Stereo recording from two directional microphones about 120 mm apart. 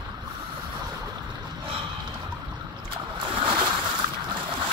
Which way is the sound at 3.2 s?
45° right (ahead or behind).